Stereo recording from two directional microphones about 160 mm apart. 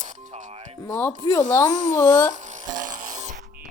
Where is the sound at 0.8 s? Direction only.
15° left (ahead or behind).